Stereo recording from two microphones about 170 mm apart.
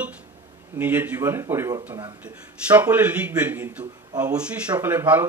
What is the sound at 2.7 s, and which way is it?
Speech, 10° right (ahead or behind).